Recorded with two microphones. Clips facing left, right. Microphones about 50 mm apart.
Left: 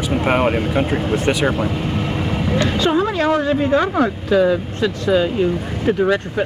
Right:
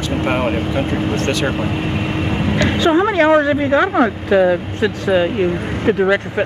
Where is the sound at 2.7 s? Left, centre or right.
Right.